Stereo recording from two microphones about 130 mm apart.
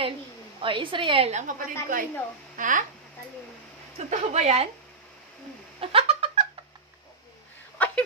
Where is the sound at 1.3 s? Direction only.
90° right.